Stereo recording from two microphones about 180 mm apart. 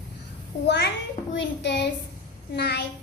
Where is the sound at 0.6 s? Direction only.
75° left (ahead or behind).